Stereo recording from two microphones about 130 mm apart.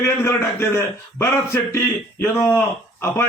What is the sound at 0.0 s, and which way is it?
A man's voice, 20° left (ahead or behind).